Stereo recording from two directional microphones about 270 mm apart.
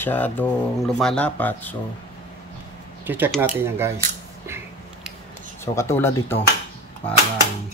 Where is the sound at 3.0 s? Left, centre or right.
Centre.